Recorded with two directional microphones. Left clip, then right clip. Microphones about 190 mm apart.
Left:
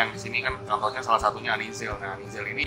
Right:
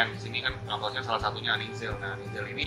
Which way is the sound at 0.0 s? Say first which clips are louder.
Left 3 dB; 20° left (ahead or behind).